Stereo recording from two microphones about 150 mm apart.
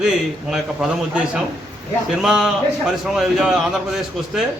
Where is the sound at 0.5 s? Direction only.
5° right (ahead or behind).